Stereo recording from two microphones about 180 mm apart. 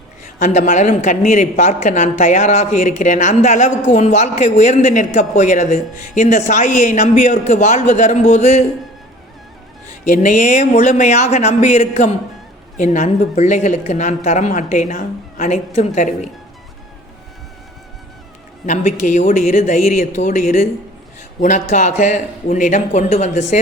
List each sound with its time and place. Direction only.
0.3 s speech: 40° left (ahead or behind)
9.9 s a man's voice: 45° left (ahead or behind)
18.6 s a man's voice: 40° left (ahead or behind)